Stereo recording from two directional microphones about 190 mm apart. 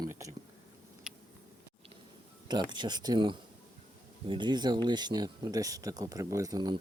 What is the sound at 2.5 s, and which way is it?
Speech, 25° right (ahead or behind).